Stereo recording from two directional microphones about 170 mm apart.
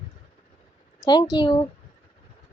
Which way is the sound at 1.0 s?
25° left (ahead or behind).